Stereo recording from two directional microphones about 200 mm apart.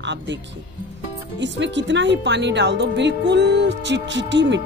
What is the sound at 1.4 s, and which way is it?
Speech, 65° right (ahead or behind).